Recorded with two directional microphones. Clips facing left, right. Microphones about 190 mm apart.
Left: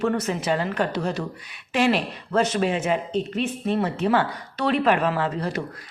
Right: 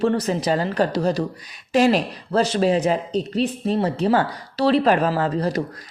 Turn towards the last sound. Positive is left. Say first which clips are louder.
# right 4 dB
turn(degrees=-40)  # may be behind; listen again after turning